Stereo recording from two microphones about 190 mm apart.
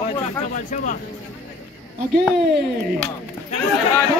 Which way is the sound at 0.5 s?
40° left (ahead or behind).